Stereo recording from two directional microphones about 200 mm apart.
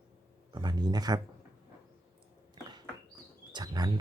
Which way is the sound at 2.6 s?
25° right (ahead or behind).